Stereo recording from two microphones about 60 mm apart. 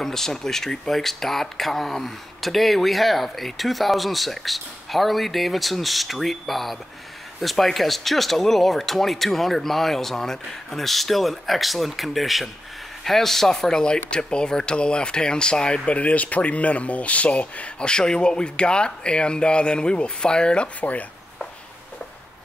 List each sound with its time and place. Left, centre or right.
0.0 s speech: centre; by 21.0 s left